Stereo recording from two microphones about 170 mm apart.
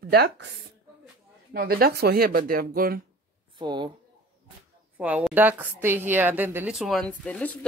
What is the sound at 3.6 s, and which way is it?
Speech, 25° right (ahead or behind).